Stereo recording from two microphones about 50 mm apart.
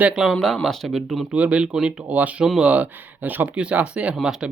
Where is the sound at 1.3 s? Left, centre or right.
Right.